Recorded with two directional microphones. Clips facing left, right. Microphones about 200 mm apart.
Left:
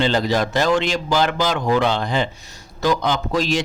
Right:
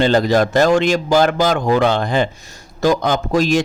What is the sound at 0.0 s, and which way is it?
A man's voice, 50° right (ahead or behind).